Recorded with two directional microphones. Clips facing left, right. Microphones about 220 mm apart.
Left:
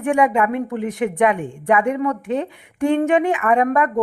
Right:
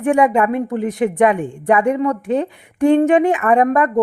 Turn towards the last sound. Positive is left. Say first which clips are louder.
# right 3 dB
turn(degrees=-40)  # may be behind; listen again after turning